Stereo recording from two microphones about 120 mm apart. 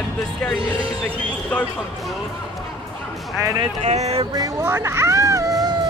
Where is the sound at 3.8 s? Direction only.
65° right (ahead or behind).